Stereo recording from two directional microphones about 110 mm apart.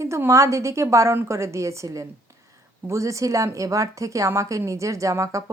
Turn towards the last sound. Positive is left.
turn(degrees=-30)  # may be behind; listen again after turning